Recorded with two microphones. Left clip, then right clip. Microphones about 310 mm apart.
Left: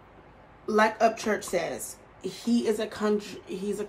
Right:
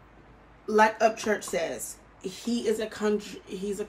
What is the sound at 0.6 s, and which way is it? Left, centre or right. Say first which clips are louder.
Speech: right 1 dB; centre.